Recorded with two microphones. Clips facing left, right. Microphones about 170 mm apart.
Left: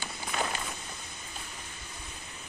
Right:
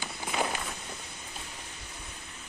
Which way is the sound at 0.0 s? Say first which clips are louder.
Right 2 dB; 15° right (ahead or behind).